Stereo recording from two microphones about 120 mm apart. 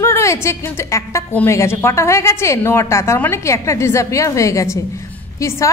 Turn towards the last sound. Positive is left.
turn(degrees=25)  # may be behind; listen again after turning